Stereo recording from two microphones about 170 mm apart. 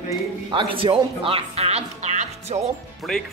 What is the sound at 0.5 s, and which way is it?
Speech, 30° right (ahead or behind).